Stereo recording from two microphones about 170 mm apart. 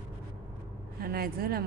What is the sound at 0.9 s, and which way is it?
Speech, 60° right (ahead or behind).